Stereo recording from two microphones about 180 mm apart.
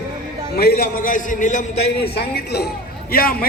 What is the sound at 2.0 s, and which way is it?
A man's voice, 65° left (ahead or behind).